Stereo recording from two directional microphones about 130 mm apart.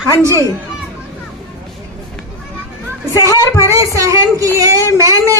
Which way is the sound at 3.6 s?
25° right (ahead or behind).